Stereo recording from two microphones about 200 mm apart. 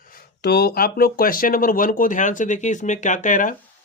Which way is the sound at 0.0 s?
45° left (ahead or behind).